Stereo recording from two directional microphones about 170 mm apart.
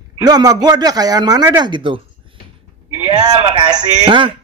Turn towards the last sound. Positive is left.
turn(degrees=-25)  # may be behind; listen again after turning